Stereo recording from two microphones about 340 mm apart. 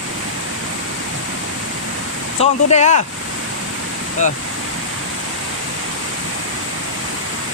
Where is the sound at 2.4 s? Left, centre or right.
Centre.